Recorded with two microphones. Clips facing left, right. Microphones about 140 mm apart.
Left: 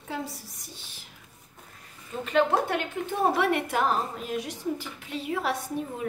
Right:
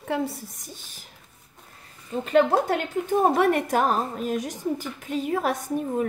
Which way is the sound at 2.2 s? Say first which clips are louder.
Right 4 dB; 40° right (ahead or behind).